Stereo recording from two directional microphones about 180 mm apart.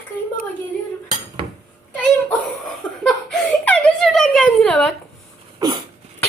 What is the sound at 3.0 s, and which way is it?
Speech, centre (ahead or behind).